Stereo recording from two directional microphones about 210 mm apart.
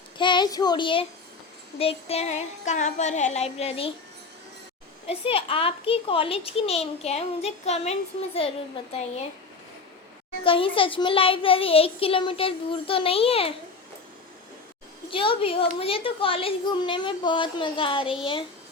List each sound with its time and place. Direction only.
0.2 s child singing: 20° left (ahead or behind)
1.8 s music: 30° left (ahead or behind)
5.0 s a child's voice: 25° left (ahead or behind)
10.4 s a child's voice: 25° left (ahead or behind)
15.1 s a child's voice: 25° left (ahead or behind)